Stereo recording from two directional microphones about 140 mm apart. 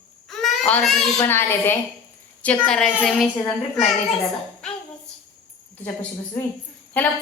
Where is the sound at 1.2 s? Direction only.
15° left (ahead or behind); by 3.2 s centre (ahead or behind).